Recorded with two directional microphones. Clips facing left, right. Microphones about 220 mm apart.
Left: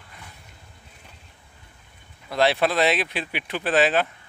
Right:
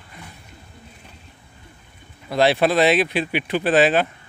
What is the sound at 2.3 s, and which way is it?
Speech, 10° right (ahead or behind).